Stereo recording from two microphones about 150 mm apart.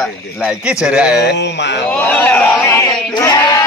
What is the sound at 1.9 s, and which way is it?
Speech, 10° left (ahead or behind).